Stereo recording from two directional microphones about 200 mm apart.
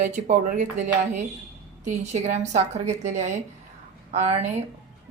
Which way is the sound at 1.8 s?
35° right (ahead or behind).